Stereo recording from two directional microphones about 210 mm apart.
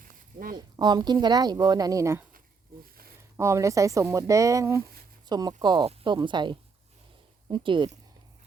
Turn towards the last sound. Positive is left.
turn(degrees=-25)  # may be behind; listen again after turning